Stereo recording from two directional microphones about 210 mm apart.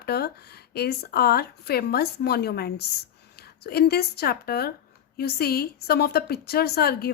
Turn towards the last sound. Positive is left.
turn(degrees=45)  # may be behind; listen again after turning